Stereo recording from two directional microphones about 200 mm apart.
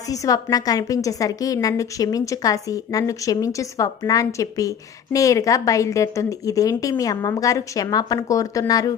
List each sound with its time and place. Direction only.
0.1 s a woman's voice: 15° left (ahead or behind)